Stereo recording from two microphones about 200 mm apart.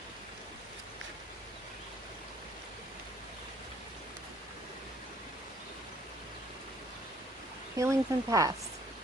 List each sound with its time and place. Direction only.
7.8 s speech: 15° right (ahead or behind)